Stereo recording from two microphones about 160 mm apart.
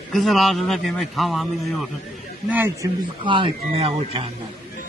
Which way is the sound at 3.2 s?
35° right (ahead or behind).